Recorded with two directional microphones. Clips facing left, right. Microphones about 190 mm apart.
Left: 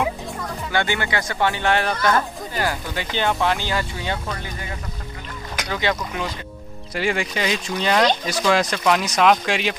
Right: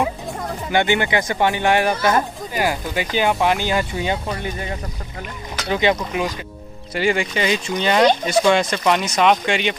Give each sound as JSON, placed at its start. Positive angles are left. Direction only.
{"t": 0.7, "sound": "speech", "side_deg": -20}
{"t": 5.7, "sound": "speech", "side_deg": -20}
{"t": 6.9, "sound": "speech", "side_deg": 0}